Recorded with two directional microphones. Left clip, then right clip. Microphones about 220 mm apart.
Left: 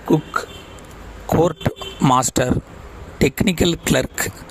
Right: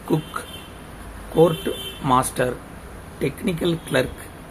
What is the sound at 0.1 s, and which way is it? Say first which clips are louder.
Speech: left 5 dB; 25° left (ahead or behind).